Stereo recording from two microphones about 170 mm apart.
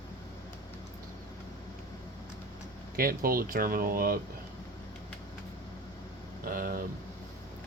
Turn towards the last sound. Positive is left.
turn(degrees=-55)  # may be behind; listen again after turning